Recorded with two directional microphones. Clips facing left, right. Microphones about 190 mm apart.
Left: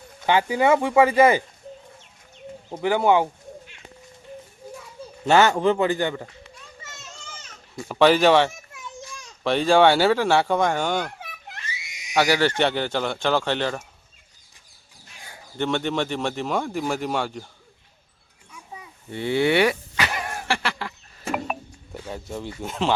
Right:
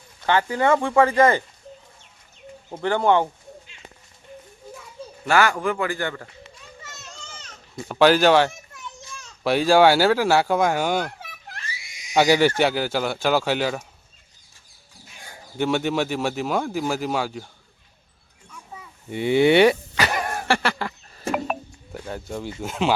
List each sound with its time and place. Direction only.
0.3 s speech: 15° left (ahead or behind)
2.7 s speech: 10° left (ahead or behind)
5.2 s a man's voice: 25° left (ahead or behind)
7.9 s speech: centre (ahead or behind)
11.2 s a sound: 20° left (ahead or behind)
12.1 s speech: 15° right (ahead or behind)
15.5 s speech: 5° right (ahead or behind)
18.5 s a sound: 15° left (ahead or behind)
19.1 s speech: 15° right (ahead or behind)
20.0 s a sound: 45° right (ahead or behind)
21.9 s speech: centre (ahead or behind)